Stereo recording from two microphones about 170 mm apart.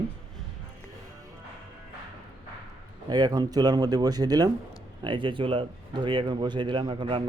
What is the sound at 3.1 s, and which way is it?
Speech, 25° right (ahead or behind).